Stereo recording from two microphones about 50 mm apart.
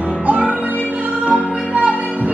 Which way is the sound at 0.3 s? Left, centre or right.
Right.